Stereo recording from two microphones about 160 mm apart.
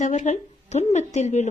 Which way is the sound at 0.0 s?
50° left (ahead or behind).